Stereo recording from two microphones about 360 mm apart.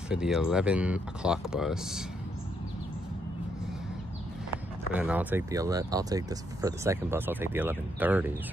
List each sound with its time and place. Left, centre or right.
0.1 s speech: centre
4.9 s speech: centre